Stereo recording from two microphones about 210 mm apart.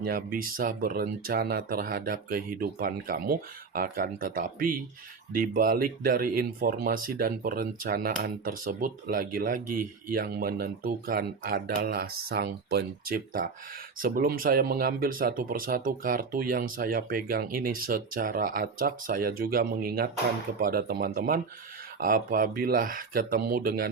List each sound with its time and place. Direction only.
0.0 s speech: 45° right (ahead or behind)